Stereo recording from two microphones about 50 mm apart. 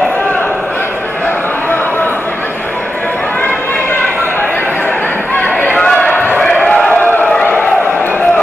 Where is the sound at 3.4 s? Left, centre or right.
Left.